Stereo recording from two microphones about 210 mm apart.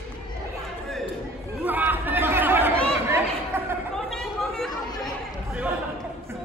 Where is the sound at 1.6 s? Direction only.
10° right (ahead or behind).